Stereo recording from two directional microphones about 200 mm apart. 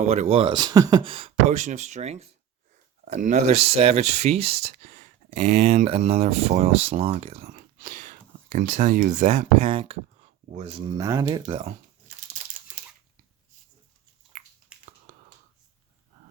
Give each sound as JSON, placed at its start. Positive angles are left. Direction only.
{"t": 0.0, "sound": "speech", "side_deg": -35}
{"t": 14.7, "sound": "finger snapping", "side_deg": -5}